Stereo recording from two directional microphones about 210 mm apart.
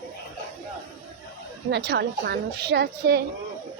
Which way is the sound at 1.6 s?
50° right (ahead or behind).